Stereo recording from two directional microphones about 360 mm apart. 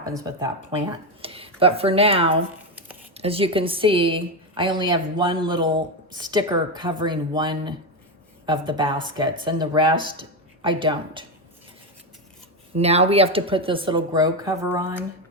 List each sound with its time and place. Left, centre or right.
0.0 s speech: centre
12.7 s speech: centre